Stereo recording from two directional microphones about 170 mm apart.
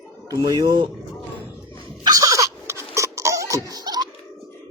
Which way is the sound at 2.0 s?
20° right (ahead or behind).